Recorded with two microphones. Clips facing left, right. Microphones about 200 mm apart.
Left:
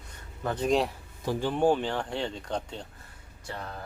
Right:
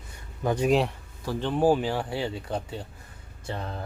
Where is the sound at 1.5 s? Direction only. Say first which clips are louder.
Right 3 dB; 5° right (ahead or behind).